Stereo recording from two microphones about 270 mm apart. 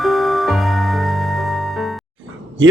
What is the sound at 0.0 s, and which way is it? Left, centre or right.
Music, centre.